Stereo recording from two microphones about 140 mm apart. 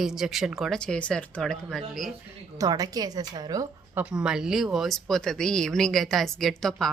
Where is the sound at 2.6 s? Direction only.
25° right (ahead or behind).